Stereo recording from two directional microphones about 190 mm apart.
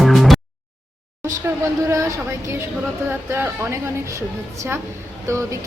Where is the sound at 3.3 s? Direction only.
10° right (ahead or behind).